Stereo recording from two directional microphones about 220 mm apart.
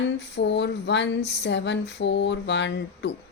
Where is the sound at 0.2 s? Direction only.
50° left (ahead or behind).